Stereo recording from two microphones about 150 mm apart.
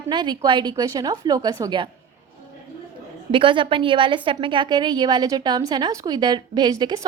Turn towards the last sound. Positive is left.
turn(degrees=-25)  # may be behind; listen again after turning